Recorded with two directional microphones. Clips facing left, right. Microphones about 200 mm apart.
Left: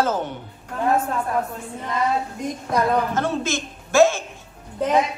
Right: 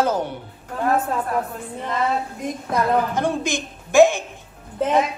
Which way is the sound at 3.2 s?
15° right (ahead or behind).